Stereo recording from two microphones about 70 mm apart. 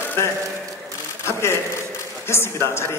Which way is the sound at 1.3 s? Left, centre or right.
Left.